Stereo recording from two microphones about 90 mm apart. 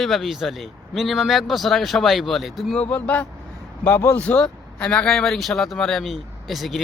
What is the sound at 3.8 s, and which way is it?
Speech, 30° left (ahead or behind).